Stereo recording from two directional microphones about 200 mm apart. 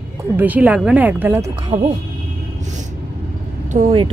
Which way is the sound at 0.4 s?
10° right (ahead or behind).